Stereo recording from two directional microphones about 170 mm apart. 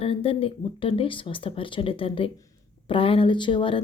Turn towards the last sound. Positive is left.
turn(degrees=30)  # may be behind; listen again after turning